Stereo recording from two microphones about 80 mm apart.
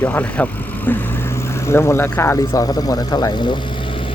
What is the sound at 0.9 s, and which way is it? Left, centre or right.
Vehicle, left.